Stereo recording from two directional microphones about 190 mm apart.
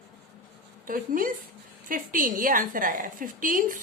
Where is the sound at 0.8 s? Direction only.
45° right (ahead or behind).